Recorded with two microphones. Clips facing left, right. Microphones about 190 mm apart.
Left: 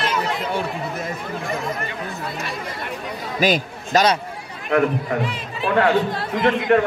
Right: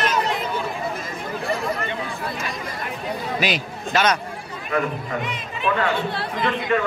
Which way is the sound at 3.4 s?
45° left (ahead or behind).